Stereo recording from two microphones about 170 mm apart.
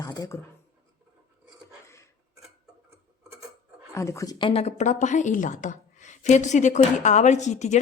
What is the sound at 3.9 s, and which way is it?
Speech, 15° left (ahead or behind).